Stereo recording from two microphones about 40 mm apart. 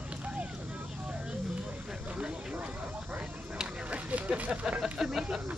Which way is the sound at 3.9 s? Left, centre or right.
Right.